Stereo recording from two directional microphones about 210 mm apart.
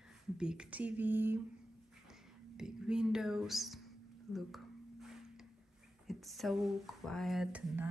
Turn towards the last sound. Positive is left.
turn(degrees=-5)  # may be behind; listen again after turning